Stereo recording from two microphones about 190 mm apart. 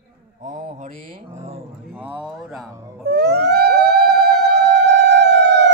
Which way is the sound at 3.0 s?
60° right (ahead or behind).